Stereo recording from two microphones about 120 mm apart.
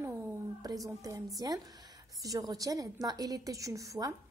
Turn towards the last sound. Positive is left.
turn(degrees=-30)  # may be behind; listen again after turning